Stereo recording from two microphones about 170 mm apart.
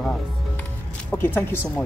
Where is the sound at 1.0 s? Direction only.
10° left (ahead or behind).